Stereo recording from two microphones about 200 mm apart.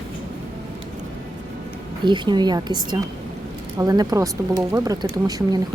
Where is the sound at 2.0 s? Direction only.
25° right (ahead or behind).